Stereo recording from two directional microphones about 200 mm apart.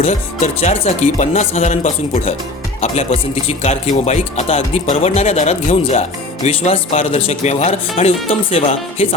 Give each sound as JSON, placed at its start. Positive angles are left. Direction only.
{"t": 0.0, "sound": "speech", "side_deg": 35}